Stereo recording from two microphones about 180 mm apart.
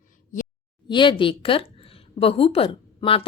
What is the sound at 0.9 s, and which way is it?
A woman's voice, 25° left (ahead or behind).